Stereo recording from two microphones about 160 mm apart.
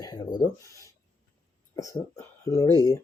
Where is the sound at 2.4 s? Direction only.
20° left (ahead or behind).